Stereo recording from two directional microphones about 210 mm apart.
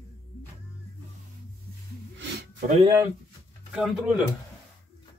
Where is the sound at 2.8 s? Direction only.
20° right (ahead or behind).